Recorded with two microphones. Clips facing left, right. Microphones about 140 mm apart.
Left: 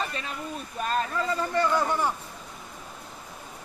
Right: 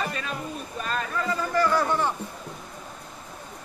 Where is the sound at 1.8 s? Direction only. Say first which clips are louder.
Right 1 dB; 10° left (ahead or behind).